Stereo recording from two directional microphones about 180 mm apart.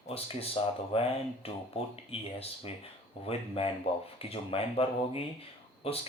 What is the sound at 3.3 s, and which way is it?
Speech, 30° left (ahead or behind).